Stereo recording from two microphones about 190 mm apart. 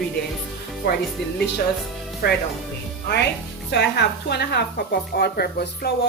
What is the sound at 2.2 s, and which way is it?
Speech, 50° left (ahead or behind).